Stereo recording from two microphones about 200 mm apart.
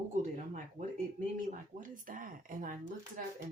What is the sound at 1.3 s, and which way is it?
Speech, 40° right (ahead or behind).